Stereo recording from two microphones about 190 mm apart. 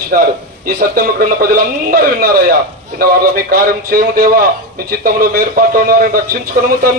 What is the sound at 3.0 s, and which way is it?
A man's voice, 50° right (ahead or behind).